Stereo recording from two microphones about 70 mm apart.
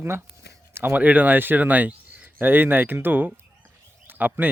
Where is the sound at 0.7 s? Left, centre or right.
Right.